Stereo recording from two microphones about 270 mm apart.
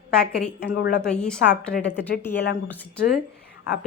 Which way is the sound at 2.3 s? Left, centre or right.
Left.